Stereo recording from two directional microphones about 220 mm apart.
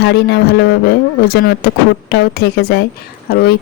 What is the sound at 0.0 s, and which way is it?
Speech, 50° left (ahead or behind).